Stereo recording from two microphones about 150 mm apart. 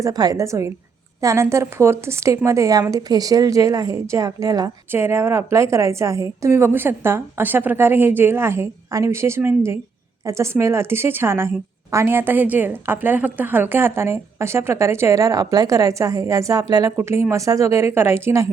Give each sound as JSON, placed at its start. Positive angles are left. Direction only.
{"t": 0.0, "sound": "a woman's voice", "side_deg": -25}